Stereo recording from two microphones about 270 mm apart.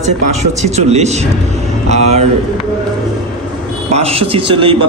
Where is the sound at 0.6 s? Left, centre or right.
Right.